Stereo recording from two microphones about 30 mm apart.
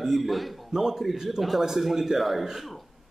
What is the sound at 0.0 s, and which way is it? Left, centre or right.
A man's voice, centre.